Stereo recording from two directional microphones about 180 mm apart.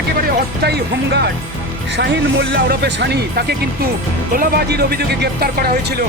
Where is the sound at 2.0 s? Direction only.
70° right (ahead or behind).